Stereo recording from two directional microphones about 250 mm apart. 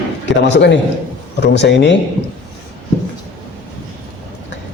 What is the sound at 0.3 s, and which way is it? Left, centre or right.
A man's voice, left.